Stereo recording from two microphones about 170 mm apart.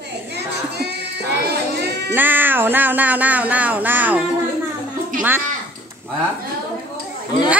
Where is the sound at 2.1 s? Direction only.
10° right (ahead or behind).